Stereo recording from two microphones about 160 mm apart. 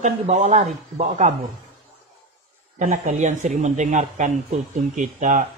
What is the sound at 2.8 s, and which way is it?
Speech, 50° right (ahead or behind).